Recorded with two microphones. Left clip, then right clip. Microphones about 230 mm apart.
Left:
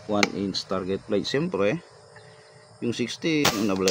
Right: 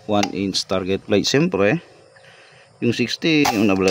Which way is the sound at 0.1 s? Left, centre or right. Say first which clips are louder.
Right 4 dB; right.